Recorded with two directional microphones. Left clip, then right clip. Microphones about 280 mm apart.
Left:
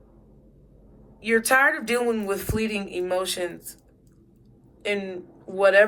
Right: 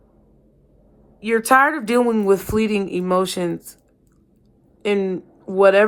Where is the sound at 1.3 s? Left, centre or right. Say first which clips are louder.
Right 4 dB; centre.